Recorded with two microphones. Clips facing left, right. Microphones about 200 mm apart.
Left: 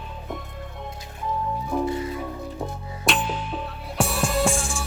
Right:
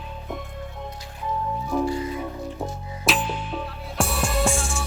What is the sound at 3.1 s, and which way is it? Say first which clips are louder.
Music: even; centre (ahead or behind).